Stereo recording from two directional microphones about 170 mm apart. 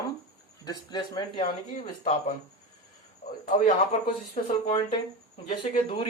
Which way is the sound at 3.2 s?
50° left (ahead or behind).